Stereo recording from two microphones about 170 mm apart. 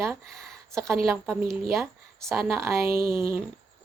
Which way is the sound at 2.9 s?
60° right (ahead or behind).